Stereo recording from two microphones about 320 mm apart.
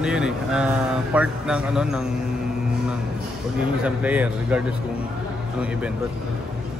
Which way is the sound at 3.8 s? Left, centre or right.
Centre.